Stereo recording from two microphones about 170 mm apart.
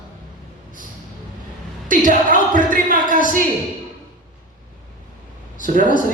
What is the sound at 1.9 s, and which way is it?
A man's voice, 50° right (ahead or behind).